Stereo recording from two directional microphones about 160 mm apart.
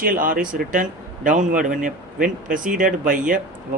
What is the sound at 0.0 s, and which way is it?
A man's voice, 60° right (ahead or behind).